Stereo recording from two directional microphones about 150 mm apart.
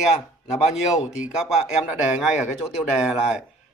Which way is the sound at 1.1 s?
5° right (ahead or behind).